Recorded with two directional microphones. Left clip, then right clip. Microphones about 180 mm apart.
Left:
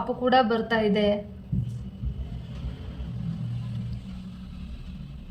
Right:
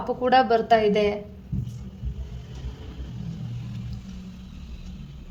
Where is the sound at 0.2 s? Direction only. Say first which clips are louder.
Right 3 dB; 35° right (ahead or behind).